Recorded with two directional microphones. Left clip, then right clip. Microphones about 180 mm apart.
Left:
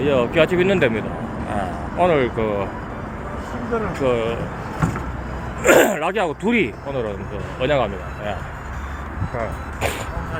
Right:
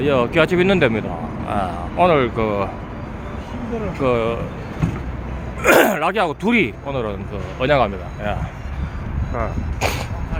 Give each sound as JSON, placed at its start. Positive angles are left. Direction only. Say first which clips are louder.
{"t": 0.0, "sound": "speech", "louder": "right 1 dB", "side_deg": -20}
{"t": 4.0, "sound": "speech", "louder": "right 3 dB", "side_deg": -25}
{"t": 5.6, "sound": "speech", "louder": "right 1 dB", "side_deg": -10}
{"t": 7.6, "sound": "speech", "louder": "right 3 dB", "side_deg": -30}
{"t": 9.4, "sound": "speech", "louder": "right 2 dB", "side_deg": -20}